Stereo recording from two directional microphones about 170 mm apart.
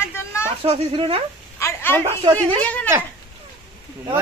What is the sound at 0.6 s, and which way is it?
Speech, 35° right (ahead or behind).